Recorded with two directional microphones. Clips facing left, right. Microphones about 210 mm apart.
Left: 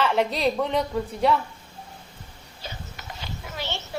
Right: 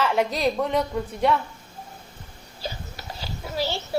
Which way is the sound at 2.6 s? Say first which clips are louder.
Right 5 dB; 35° right (ahead or behind).